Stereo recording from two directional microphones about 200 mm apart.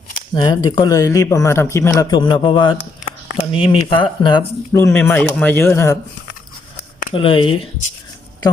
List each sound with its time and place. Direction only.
0.3 s speech: 20° left (ahead or behind)
7.1 s speech: 25° left (ahead or behind)